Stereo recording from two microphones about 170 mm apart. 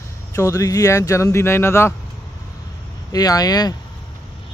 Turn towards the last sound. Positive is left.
turn(degrees=20)  # may be behind; listen again after turning